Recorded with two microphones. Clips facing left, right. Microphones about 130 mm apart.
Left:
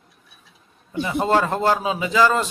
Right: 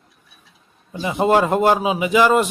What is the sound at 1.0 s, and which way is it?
Speech, 15° right (ahead or behind).